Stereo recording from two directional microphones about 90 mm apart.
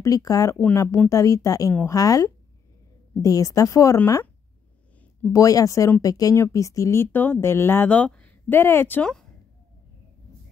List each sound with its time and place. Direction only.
0.0 s speech: 40° left (ahead or behind)
5.3 s speech: 40° left (ahead or behind); by 9.1 s 20° left (ahead or behind)